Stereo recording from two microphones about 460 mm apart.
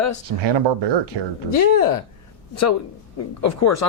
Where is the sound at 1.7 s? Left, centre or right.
Left.